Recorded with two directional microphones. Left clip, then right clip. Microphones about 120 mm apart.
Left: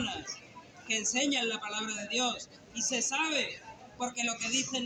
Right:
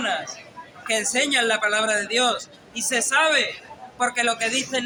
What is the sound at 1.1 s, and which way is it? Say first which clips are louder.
A man's voice: right 12 dB; 40° right (ahead or behind).